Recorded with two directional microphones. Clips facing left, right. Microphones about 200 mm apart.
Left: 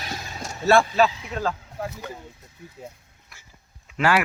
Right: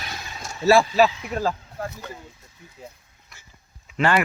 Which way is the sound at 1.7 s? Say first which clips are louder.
Even; 5° left (ahead or behind).